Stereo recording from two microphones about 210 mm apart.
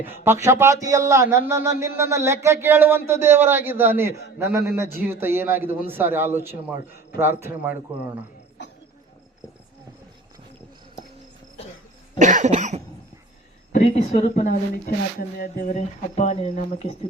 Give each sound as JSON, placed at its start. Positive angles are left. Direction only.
{"t": 0.0, "sound": "a man's voice", "side_deg": -10}
{"t": 12.2, "sound": "cough", "side_deg": -35}
{"t": 13.7, "sound": "speech", "side_deg": 35}